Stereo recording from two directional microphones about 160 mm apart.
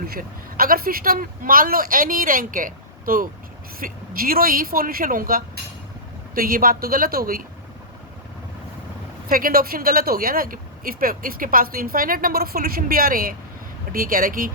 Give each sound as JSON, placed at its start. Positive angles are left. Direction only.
{"t": 0.0, "sound": "speech", "side_deg": -65}
{"t": 9.3, "sound": "speech", "side_deg": -65}